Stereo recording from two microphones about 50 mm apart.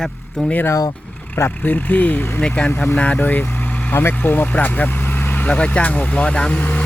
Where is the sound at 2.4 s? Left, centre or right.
Left.